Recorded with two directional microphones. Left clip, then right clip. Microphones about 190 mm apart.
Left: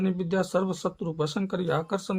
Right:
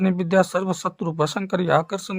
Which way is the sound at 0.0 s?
35° right (ahead or behind).